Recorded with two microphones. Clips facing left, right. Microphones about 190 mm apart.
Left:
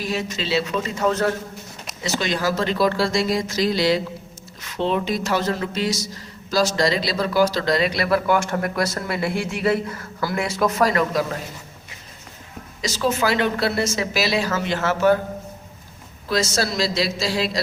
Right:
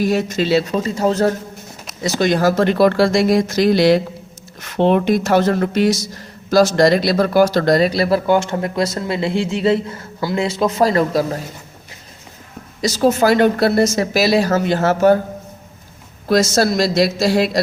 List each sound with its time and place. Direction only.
0.0 s a woman's voice: 45° right (ahead or behind)
12.8 s a woman's voice: 40° right (ahead or behind)
16.3 s speech: 45° right (ahead or behind)